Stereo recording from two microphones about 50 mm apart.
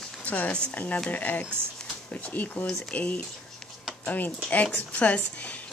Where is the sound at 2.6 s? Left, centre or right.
Left.